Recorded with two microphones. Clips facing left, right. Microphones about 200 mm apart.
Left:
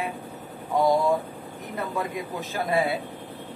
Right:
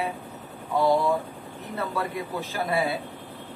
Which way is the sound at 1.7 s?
15° left (ahead or behind).